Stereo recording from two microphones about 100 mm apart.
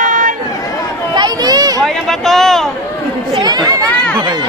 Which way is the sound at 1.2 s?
45° right (ahead or behind).